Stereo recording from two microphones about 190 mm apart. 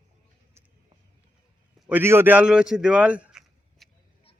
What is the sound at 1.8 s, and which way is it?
A man's voice, 10° right (ahead or behind).